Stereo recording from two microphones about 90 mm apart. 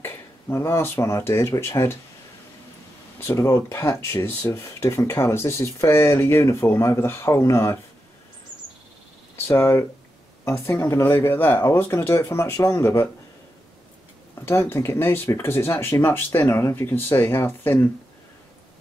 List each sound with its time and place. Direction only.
0.0 s speech: 30° left (ahead or behind)
3.2 s speech: 30° left (ahead or behind)
9.5 s speech: 25° left (ahead or behind)
14.4 s speech: 25° left (ahead or behind)